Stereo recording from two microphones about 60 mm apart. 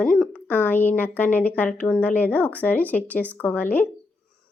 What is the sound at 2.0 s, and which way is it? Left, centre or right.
Speech, left.